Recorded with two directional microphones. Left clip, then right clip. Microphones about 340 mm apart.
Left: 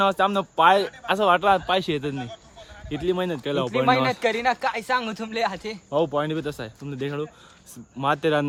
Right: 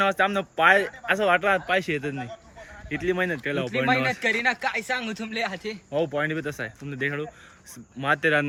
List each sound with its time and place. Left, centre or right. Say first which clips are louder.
0.0 s speech: left 2 dB; centre; by 5.7 s left
5.9 s speech: left 2 dB; centre